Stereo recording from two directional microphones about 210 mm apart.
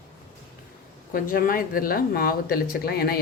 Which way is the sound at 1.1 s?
40° left (ahead or behind).